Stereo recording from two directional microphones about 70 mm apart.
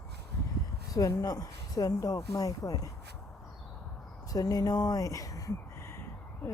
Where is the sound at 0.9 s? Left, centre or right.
Left.